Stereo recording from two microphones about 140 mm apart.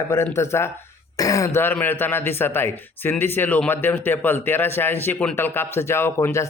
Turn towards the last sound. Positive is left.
turn(degrees=20)  # may be behind; listen again after turning